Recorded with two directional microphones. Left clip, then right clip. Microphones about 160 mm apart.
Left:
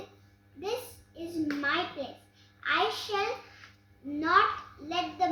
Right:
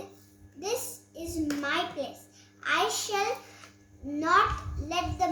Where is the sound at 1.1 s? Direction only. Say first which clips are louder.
Right 1 dB; 20° right (ahead or behind).